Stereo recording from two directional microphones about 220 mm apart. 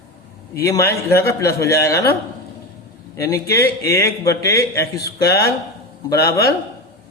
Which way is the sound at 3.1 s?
15° left (ahead or behind).